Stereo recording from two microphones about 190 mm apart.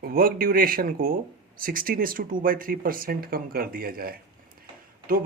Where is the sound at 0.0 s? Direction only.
50° right (ahead or behind).